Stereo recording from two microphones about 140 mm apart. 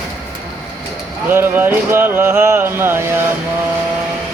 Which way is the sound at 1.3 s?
15° right (ahead or behind).